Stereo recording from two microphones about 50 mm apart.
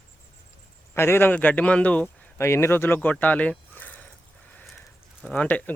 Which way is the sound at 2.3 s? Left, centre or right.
Left.